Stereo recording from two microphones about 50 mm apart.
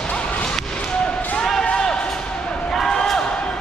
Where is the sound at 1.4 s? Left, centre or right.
Centre.